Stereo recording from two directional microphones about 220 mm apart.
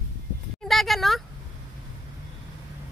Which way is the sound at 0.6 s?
Centre (ahead or behind).